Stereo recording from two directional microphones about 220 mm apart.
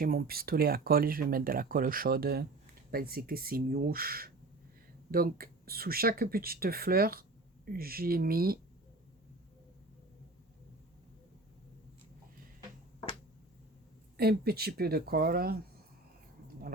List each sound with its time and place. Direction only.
0.0 s speech: 40° right (ahead or behind)
14.2 s speech: 45° right (ahead or behind)